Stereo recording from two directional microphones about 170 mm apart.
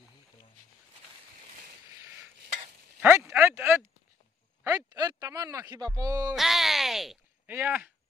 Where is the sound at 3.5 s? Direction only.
10° right (ahead or behind).